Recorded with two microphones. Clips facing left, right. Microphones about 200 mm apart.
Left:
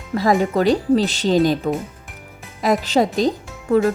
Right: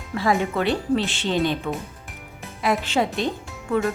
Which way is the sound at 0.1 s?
40° left (ahead or behind).